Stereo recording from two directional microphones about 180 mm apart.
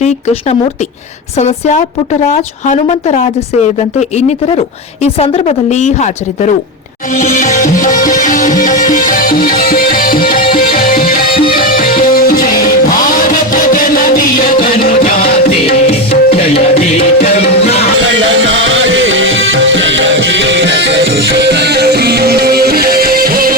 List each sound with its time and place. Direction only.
1.4 s speech: 40° left (ahead or behind)
4.3 s speech: 35° left (ahead or behind)
7.2 s music: 45° left (ahead or behind)
15.9 s music: 35° left (ahead or behind)
18.1 s music: 90° right; by 23.6 s 55° right (ahead or behind)